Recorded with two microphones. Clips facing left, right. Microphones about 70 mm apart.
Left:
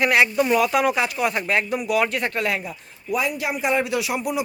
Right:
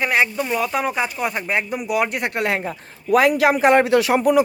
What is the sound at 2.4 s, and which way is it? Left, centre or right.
Speech, right.